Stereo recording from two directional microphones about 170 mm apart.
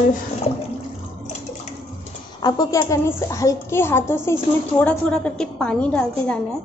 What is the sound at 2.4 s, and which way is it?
A woman's voice, 20° left (ahead or behind).